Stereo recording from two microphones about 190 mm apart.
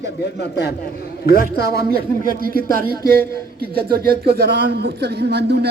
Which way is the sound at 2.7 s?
50° right (ahead or behind).